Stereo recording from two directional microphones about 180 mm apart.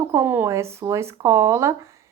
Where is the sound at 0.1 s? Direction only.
10° right (ahead or behind).